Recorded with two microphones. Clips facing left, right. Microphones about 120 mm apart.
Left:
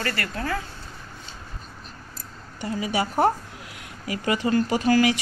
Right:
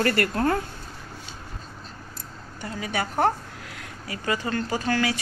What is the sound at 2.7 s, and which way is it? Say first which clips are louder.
A woman's voice: left 2 dB; 10° left (ahead or behind).